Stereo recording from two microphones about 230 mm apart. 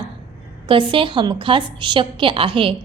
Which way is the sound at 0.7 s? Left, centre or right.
Right.